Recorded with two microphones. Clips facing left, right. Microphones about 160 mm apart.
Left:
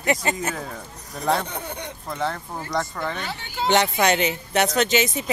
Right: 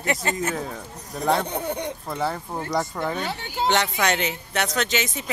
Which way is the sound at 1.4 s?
30° right (ahead or behind).